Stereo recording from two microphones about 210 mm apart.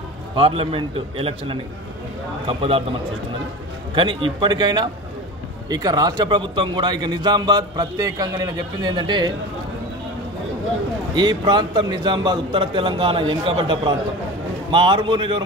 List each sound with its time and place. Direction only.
0.4 s a man's voice: 25° right (ahead or behind)
3.9 s a man's voice: 25° right (ahead or behind)
11.1 s a man's voice: 20° right (ahead or behind)